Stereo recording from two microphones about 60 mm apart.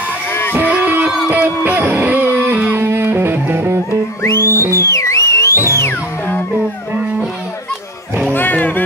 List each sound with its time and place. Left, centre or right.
0.3 s music: left
0.6 s music: right
1.0 s music: centre
1.3 s music: right
2.8 s music: right
4.2 s music: left
4.5 s music: right
4.8 s music: left
5.5 s music: right
8.3 s music: left